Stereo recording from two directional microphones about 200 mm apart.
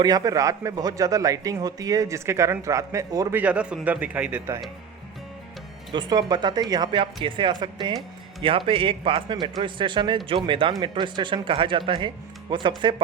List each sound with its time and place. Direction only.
0.0 s a man's voice: 20° right (ahead or behind)
5.9 s speech: 20° right (ahead or behind)